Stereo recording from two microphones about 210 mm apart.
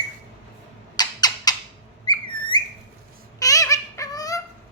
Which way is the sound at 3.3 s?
15° left (ahead or behind).